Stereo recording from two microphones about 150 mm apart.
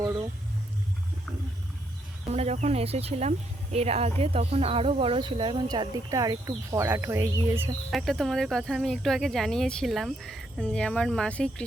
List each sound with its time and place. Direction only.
2.3 s speech: 45° right (ahead or behind); by 7.7 s 15° right (ahead or behind)
7.9 s speech: centre (ahead or behind)